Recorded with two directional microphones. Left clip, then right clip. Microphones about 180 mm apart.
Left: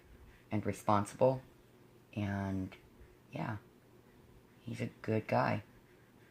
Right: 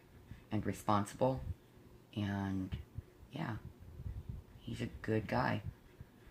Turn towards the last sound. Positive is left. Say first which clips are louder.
# left 3 dB
turn(degrees=25)  # may be behind; listen again after turning